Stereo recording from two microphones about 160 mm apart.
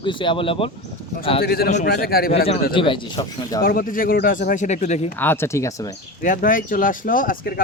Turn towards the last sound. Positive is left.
turn(degrees=60)  # may be behind; listen again after turning